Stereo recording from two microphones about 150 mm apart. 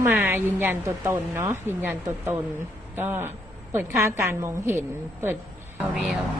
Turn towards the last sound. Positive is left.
turn(degrees=0)  # may be behind; listen again after turning